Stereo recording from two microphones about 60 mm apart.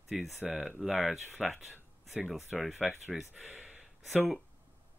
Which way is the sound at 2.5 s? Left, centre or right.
Centre.